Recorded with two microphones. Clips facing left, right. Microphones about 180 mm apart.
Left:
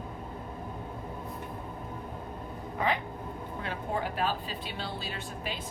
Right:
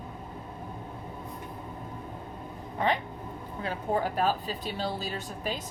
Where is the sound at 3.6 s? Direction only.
40° right (ahead or behind).